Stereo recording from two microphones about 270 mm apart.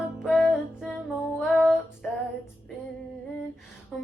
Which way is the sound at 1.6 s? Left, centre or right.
Centre.